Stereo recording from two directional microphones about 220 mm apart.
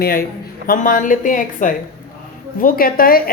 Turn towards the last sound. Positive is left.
turn(degrees=40)  # may be behind; listen again after turning